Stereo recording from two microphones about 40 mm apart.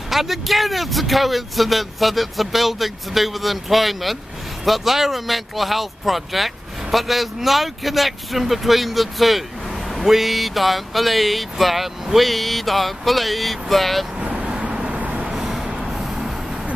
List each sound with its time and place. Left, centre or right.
0.1 s speech: centre
14.2 s vehicle: right
14.9 s vehicle: right
15.2 s vehicle: centre